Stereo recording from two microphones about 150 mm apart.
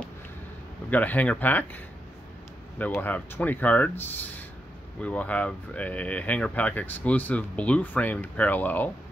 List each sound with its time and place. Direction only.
0.8 s speech: 10° left (ahead or behind)
2.8 s speech: 10° left (ahead or behind)